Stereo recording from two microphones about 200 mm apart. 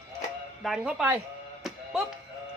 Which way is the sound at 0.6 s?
Centre (ahead or behind).